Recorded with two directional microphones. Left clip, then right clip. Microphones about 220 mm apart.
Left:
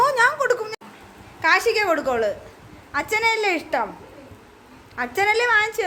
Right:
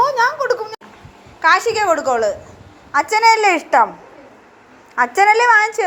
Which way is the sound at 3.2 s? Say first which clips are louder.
Right 10 dB; 10° left (ahead or behind).